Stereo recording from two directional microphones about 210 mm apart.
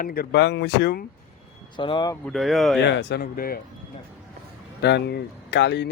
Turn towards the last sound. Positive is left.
turn(degrees=55)  # may be behind; listen again after turning